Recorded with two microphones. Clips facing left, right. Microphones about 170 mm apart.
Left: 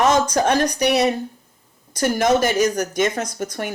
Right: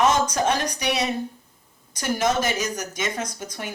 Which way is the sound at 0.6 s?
50° left (ahead or behind).